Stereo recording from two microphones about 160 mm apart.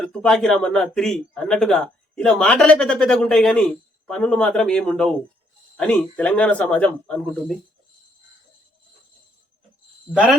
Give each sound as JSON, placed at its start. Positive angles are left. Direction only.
{"t": 0.0, "sound": "a man's voice", "side_deg": 5}
{"t": 10.1, "sound": "a man's voice", "side_deg": 0}